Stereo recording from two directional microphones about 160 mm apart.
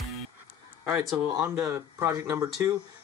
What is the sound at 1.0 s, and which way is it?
Speech, 5° right (ahead or behind).